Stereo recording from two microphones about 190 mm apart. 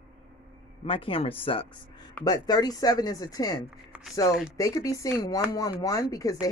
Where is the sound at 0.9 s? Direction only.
30° left (ahead or behind).